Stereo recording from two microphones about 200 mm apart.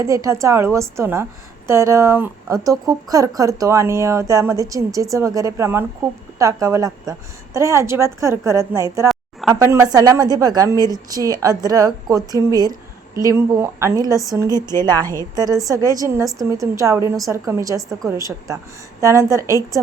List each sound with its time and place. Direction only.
0.0 s a woman's voice: 15° right (ahead or behind)
9.0 s a sound: centre (ahead or behind)
9.6 s a woman's voice: 15° right (ahead or behind)
15.4 s a woman's voice: 20° right (ahead or behind)